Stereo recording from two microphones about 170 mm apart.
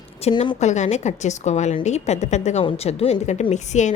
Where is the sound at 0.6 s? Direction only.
45° left (ahead or behind).